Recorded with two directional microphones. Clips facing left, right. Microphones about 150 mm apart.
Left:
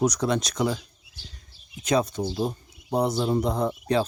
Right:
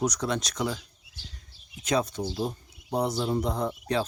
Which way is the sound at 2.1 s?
40° left (ahead or behind).